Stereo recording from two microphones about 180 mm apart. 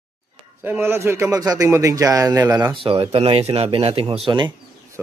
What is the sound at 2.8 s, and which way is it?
Speech, 30° right (ahead or behind).